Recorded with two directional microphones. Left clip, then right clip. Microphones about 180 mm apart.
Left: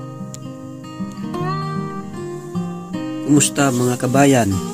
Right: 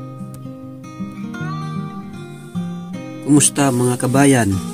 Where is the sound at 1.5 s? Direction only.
85° left.